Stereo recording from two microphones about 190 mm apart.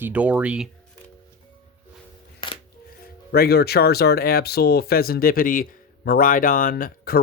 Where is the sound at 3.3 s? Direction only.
55° left (ahead or behind).